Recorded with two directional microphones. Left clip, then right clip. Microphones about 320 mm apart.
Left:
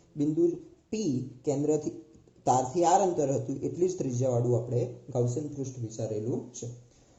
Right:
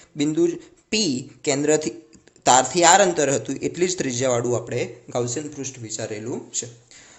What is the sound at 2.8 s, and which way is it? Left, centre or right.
Speech, right.